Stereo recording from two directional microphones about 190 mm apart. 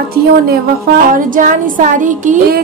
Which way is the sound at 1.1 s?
45° right (ahead or behind).